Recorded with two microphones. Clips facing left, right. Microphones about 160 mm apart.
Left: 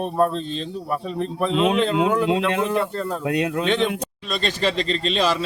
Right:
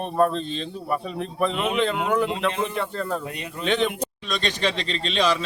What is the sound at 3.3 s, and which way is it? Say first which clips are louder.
Speech: left 12 dB; 90° left.